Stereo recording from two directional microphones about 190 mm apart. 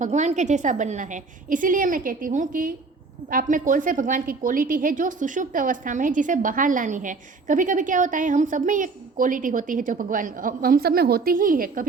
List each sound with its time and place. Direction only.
0.0 s a woman's voice: 40° right (ahead or behind)